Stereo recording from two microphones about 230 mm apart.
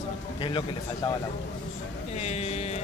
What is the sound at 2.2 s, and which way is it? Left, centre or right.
Speech, left.